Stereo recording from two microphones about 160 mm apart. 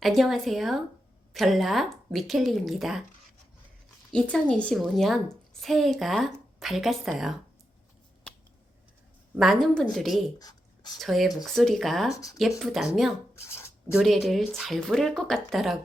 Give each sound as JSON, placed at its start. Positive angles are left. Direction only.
{"t": 0.0, "sound": "a woman's voice", "side_deg": 0}
{"t": 4.1, "sound": "a woman's voice", "side_deg": 5}
{"t": 9.3, "sound": "a woman's voice", "side_deg": 0}
{"t": 10.3, "sound": "a sound", "side_deg": 25}
{"t": 11.0, "sound": "a woman's voice", "side_deg": 0}
{"t": 12.1, "sound": "speech", "side_deg": 20}
{"t": 12.4, "sound": "a woman's voice", "side_deg": 0}
{"t": 13.5, "sound": "a sound", "side_deg": 15}
{"t": 13.9, "sound": "a woman's voice", "side_deg": 0}